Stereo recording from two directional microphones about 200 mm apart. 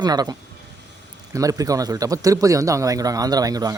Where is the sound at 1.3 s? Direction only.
15° right (ahead or behind).